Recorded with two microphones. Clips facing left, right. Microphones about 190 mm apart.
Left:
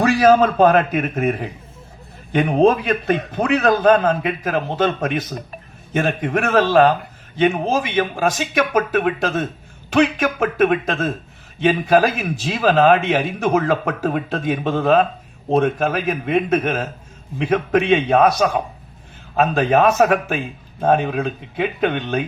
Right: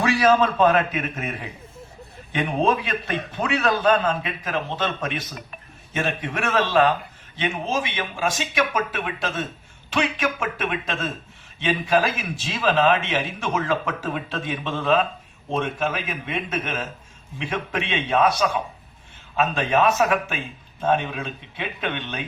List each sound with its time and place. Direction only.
0.0 s a man's voice: 45° left (ahead or behind)